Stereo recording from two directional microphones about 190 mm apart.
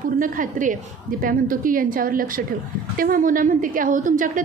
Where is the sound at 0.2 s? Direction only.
45° right (ahead or behind).